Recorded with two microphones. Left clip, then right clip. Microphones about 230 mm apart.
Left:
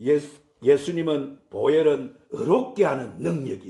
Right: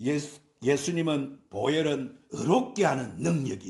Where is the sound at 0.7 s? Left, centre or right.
Right.